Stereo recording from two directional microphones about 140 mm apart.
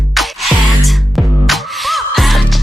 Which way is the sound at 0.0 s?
Centre (ahead or behind).